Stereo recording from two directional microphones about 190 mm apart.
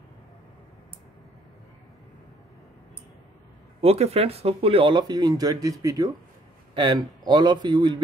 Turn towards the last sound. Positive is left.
turn(degrees=-20)  # may be behind; listen again after turning